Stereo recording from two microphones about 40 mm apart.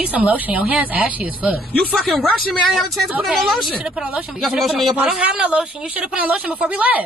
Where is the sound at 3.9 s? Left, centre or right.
Right.